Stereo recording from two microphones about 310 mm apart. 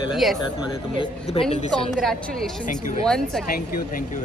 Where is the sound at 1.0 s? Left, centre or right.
Centre.